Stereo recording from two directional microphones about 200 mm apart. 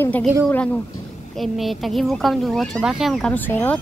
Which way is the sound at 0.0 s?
10° left (ahead or behind).